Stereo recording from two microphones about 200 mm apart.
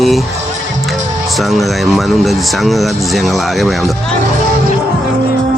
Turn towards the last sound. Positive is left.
turn(degrees=0)  # may be behind; listen again after turning